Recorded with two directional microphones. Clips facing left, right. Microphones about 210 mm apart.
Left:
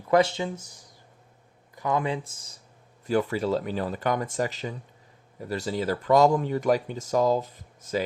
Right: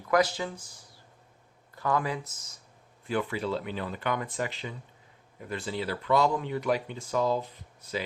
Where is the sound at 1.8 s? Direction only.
20° left (ahead or behind).